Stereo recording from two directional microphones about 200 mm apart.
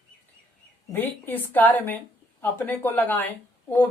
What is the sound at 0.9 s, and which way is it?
A woman's voice, 10° left (ahead or behind).